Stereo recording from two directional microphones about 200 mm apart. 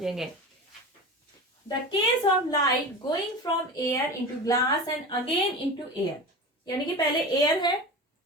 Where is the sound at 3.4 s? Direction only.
15° left (ahead or behind).